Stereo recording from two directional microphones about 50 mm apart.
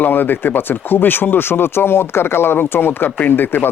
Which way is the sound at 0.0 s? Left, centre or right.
Left.